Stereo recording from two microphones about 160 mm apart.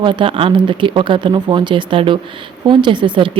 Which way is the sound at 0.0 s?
30° right (ahead or behind).